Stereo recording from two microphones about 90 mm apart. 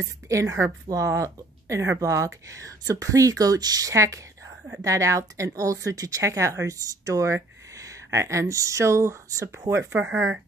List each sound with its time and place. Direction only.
0.3 s speech: 35° right (ahead or behind)